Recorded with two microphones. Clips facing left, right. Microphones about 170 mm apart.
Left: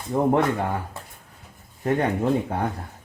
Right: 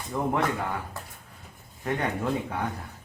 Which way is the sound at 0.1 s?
35° left (ahead or behind).